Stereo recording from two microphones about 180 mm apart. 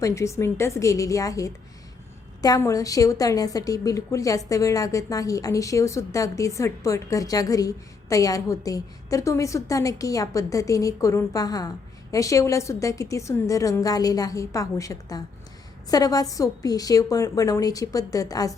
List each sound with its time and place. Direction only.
0.0 s a woman's voice: 15° left (ahead or behind)